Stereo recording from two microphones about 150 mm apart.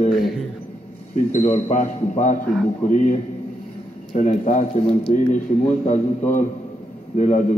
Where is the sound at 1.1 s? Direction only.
55° left (ahead or behind).